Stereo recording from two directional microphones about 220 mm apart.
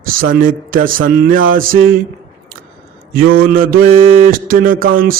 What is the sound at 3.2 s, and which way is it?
Mantra, 40° right (ahead or behind).